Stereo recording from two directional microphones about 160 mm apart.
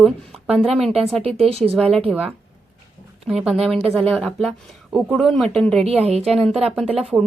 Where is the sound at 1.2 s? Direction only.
40° right (ahead or behind).